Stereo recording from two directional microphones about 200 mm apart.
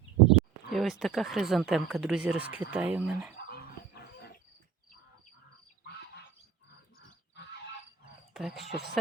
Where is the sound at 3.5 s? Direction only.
50° left (ahead or behind).